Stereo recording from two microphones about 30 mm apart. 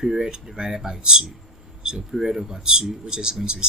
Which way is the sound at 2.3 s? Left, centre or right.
Centre.